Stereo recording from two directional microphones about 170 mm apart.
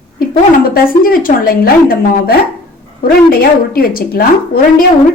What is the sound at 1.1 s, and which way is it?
A woman's voice, 55° left (ahead or behind).